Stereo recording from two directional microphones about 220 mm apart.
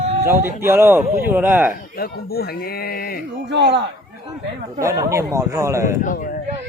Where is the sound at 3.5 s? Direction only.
50° right (ahead or behind).